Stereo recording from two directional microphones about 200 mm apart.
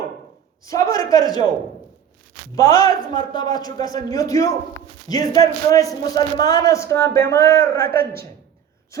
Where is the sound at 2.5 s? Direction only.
15° left (ahead or behind).